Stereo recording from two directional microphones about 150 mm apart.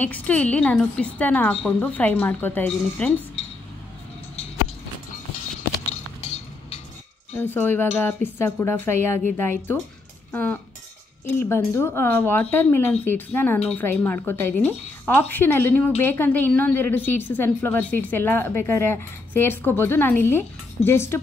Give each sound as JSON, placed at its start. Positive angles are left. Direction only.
{"t": 0.0, "sound": "a woman's voice", "side_deg": 10}
{"t": 7.3, "sound": "a woman's voice", "side_deg": 15}